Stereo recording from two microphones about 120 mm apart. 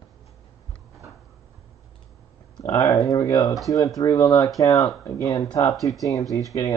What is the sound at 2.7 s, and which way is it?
Speech, 30° left (ahead or behind).